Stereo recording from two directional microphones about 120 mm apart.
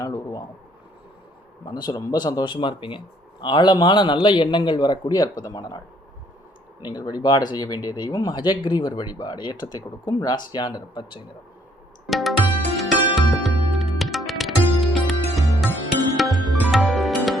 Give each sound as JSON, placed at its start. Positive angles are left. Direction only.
{"t": 0.0, "sound": "a sound", "side_deg": 30}
{"t": 1.6, "sound": "speech", "side_deg": 35}
{"t": 6.8, "sound": "speech", "side_deg": 35}
{"t": 12.0, "sound": "music", "side_deg": 0}